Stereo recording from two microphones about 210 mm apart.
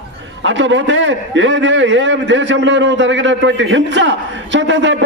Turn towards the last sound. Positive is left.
turn(degrees=-60)  # may be behind; listen again after turning